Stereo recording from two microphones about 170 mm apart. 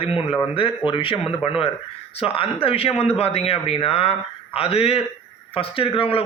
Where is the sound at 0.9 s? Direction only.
30° left (ahead or behind).